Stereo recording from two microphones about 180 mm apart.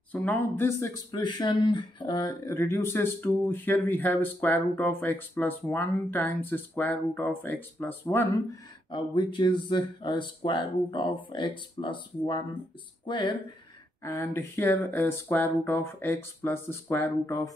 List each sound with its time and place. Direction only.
0.1 s speech: 10° left (ahead or behind)
8.9 s speech: 25° left (ahead or behind)
14.0 s speech: 15° left (ahead or behind)